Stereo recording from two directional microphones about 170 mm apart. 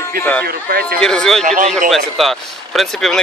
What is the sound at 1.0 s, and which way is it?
Speech, 5° left (ahead or behind).